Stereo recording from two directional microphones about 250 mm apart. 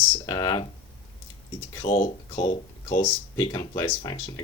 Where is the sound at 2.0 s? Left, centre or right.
Left.